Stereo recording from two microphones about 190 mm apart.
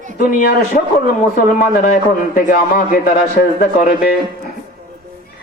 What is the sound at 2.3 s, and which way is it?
A man's voice, 50° left (ahead or behind).